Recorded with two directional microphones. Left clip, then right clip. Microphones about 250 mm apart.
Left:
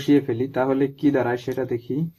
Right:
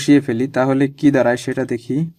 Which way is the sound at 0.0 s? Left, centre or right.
Right.